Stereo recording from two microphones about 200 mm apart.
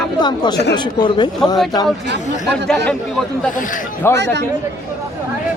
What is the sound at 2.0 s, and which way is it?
Speech, 60° right (ahead or behind).